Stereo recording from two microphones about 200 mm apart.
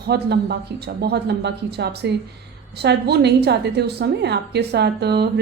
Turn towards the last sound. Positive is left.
turn(degrees=-55)  # may be behind; listen again after turning